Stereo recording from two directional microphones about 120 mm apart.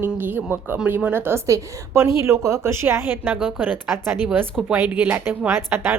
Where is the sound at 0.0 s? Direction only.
15° right (ahead or behind).